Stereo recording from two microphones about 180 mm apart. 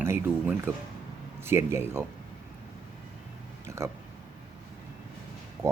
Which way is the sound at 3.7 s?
15° right (ahead or behind).